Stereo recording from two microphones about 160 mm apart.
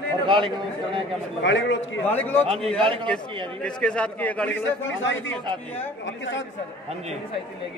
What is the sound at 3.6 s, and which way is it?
Speech, 5° left (ahead or behind).